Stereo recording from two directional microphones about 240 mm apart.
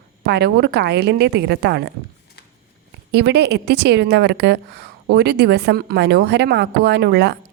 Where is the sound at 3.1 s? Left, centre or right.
Right.